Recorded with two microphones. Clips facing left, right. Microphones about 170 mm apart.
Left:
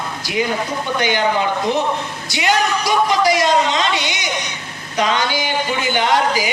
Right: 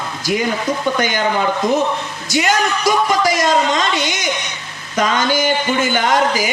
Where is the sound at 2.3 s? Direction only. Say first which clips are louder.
Right 1 dB; 45° right (ahead or behind).